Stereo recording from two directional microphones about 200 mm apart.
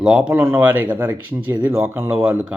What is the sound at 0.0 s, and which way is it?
Speech, 5° right (ahead or behind).